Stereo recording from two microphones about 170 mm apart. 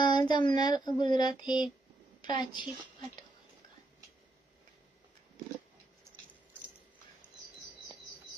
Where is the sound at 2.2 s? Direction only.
25° left (ahead or behind).